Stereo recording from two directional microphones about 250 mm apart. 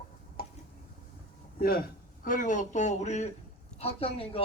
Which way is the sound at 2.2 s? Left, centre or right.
Left.